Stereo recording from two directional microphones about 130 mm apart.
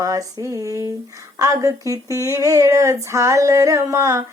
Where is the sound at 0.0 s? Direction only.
25° right (ahead or behind).